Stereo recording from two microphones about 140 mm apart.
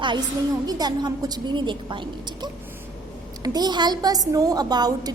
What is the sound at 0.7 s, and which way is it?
A woman's voice, 30° right (ahead or behind).